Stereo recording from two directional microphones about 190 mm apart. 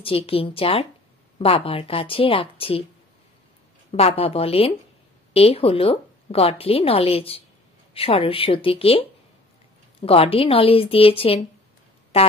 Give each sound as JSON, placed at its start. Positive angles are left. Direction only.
{"t": 0.0, "sound": "a woman's voice", "side_deg": 30}
{"t": 3.9, "sound": "a woman's voice", "side_deg": 30}